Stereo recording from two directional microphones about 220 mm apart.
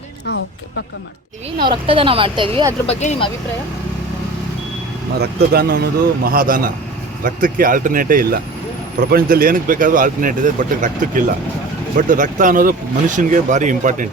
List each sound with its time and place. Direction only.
1.5 s speech: 20° right (ahead or behind)
2.8 s speech: 30° left (ahead or behind)
5.2 s speech: 45° right (ahead or behind)